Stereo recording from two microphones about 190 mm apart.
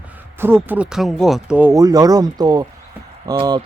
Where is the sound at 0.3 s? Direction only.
10° right (ahead or behind).